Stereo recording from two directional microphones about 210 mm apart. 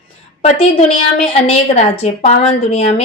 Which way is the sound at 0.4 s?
30° left (ahead or behind).